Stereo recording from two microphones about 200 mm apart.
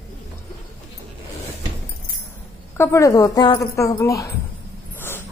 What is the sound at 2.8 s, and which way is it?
A woman's voice, 15° left (ahead or behind).